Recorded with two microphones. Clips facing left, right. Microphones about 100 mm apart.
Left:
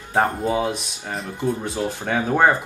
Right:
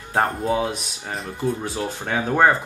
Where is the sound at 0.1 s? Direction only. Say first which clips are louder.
Left 1 dB; centre (ahead or behind).